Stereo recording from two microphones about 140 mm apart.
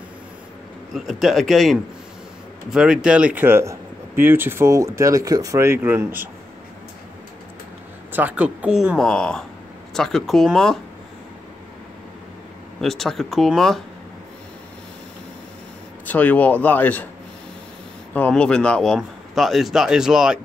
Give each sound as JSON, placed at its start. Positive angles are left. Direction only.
{"t": 0.9, "sound": "speech", "side_deg": 0}
{"t": 8.1, "sound": "speech", "side_deg": -10}
{"t": 12.8, "sound": "speech", "side_deg": 0}
{"t": 16.1, "sound": "speech", "side_deg": 10}
{"t": 18.1, "sound": "speech", "side_deg": 10}